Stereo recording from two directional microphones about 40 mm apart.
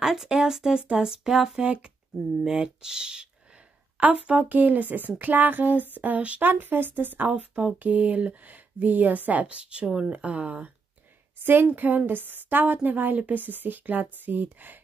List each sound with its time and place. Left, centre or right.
0.0 s speech: centre
1.6 s speech: right
2.4 s speech: centre
4.0 s speech: right
6.4 s a woman's voice: right
7.2 s speech: right
8.5 s speech: right
10.1 s speech: right
11.4 s a woman's voice: right